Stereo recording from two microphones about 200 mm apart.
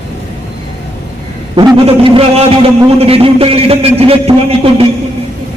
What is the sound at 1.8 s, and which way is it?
A man's voice, 30° right (ahead or behind).